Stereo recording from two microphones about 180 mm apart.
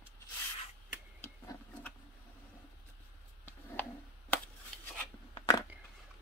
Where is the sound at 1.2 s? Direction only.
10° left (ahead or behind).